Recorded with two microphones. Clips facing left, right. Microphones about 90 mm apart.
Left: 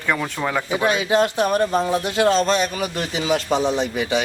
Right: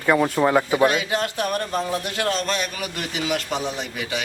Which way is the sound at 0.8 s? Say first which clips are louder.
Left 4 dB; 20° left (ahead or behind).